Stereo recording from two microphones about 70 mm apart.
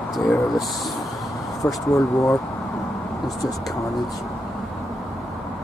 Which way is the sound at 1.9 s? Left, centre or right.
Left.